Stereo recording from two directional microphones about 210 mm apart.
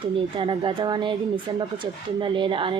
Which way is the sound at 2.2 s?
25° right (ahead or behind).